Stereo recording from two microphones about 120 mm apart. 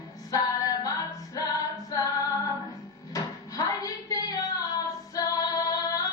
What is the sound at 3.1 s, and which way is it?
Music, 30° left (ahead or behind).